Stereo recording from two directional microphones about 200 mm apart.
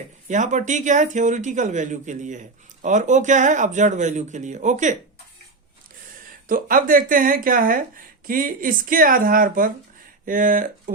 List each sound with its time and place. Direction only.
0.3 s speech: 40° right (ahead or behind)
6.5 s a woman's voice: 45° right (ahead or behind)